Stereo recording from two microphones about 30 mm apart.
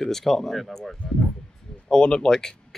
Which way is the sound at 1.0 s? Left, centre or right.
Centre.